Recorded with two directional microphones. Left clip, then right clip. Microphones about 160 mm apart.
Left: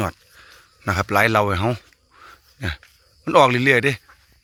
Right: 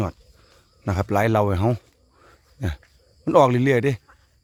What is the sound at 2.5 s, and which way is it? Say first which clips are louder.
Dog: left 4 dB; 20° right (ahead or behind).